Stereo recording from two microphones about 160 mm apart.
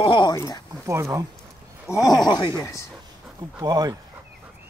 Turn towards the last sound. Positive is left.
turn(degrees=-25)  # may be behind; listen again after turning